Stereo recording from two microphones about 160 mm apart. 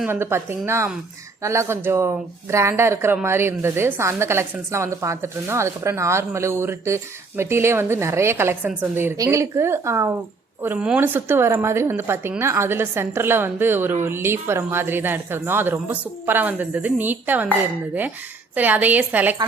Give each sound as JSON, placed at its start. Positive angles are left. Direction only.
{"t": 0.0, "sound": "a woman's voice", "side_deg": -15}